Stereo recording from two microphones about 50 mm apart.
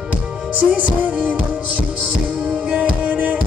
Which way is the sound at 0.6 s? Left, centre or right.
Right.